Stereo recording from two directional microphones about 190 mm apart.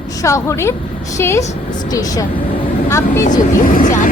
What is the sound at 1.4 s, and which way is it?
Speech, 40° left (ahead or behind).